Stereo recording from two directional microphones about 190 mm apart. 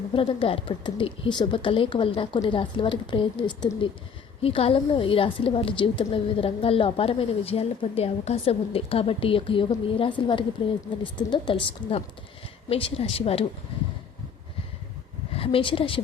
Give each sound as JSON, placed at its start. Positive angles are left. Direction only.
{"t": 0.1, "sound": "a woman's voice", "side_deg": 25}
{"t": 15.4, "sound": "a woman's voice", "side_deg": 30}